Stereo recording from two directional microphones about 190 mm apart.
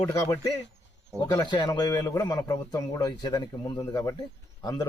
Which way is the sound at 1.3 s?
20° left (ahead or behind).